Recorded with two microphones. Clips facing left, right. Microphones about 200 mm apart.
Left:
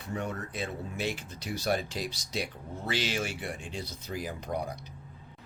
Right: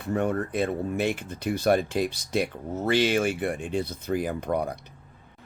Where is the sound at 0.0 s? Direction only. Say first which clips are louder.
Right 9 dB; 55° right (ahead or behind).